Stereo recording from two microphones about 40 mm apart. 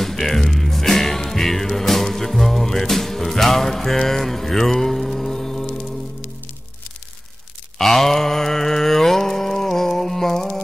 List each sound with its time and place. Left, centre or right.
0.0 s music: centre
7.8 s mantra: centre